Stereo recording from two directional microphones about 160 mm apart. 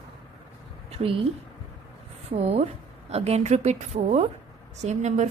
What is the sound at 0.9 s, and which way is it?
Speech, 40° right (ahead or behind).